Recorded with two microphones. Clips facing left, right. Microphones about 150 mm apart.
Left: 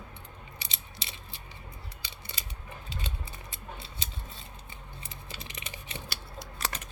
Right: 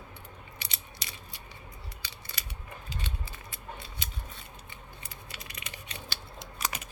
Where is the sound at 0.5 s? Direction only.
30° left (ahead or behind).